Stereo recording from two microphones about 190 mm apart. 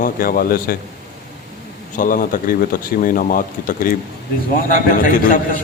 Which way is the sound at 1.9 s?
45° left (ahead or behind).